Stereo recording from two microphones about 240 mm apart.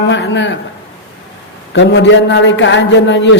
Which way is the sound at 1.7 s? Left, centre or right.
Left.